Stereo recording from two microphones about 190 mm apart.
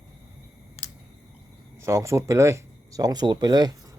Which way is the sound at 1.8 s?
15° right (ahead or behind).